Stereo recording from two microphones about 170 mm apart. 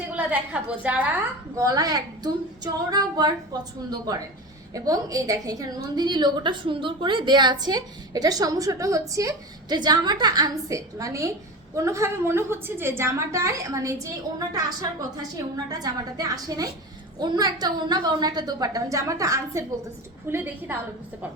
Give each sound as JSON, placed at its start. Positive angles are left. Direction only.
{"t": 0.1, "sound": "a woman's voice", "side_deg": -5}
{"t": 1.5, "sound": "a woman's voice", "side_deg": -20}